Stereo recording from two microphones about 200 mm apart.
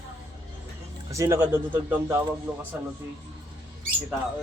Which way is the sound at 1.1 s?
15° right (ahead or behind).